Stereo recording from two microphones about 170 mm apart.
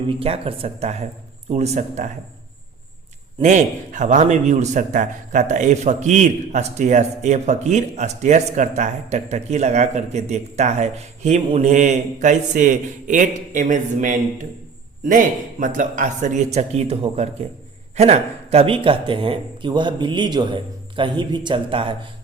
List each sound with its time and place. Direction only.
0.1 s speech: 35° right (ahead or behind)
3.4 s a man's voice: 45° right (ahead or behind); by 21.9 s 30° right (ahead or behind)